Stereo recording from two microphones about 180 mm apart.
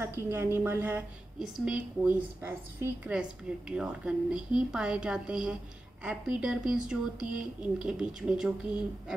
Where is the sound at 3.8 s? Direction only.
5° right (ahead or behind).